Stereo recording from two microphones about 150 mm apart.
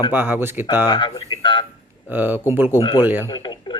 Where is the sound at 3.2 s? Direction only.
30° left (ahead or behind).